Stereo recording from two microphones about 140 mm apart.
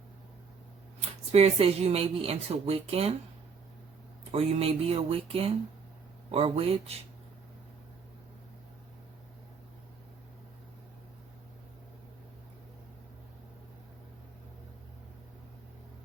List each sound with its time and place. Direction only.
1.3 s a woman's voice: 45° right (ahead or behind)
4.3 s a woman's voice: 45° right (ahead or behind)